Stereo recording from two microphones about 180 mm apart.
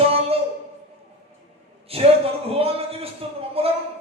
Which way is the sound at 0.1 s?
35° right (ahead or behind).